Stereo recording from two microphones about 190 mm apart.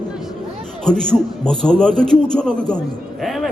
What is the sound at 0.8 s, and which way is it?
A man's voice, 5° left (ahead or behind).